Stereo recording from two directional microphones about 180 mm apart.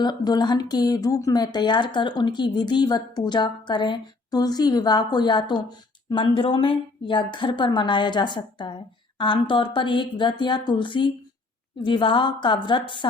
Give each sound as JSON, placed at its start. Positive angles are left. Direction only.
{"t": 0.0, "sound": "speech", "side_deg": 25}